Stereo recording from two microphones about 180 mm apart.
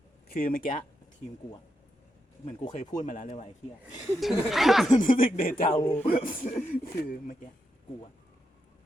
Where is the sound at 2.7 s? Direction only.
45° left (ahead or behind).